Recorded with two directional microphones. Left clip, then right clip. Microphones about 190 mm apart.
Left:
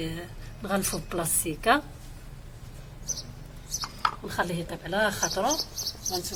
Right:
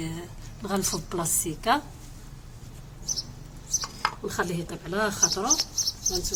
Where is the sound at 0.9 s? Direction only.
15° left (ahead or behind).